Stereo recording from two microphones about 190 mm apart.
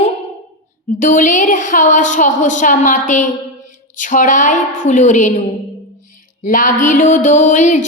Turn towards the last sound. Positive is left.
turn(degrees=40)  # may be behind; listen again after turning